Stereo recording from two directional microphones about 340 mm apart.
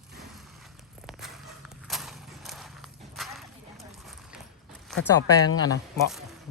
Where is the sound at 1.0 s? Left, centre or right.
Centre.